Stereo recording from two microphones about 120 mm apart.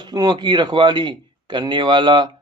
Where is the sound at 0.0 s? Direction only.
35° right (ahead or behind).